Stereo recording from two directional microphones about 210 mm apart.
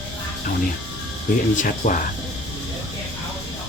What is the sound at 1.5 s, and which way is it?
Speech, 40° left (ahead or behind).